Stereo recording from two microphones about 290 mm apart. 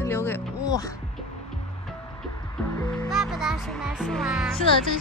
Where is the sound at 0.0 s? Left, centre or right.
Centre.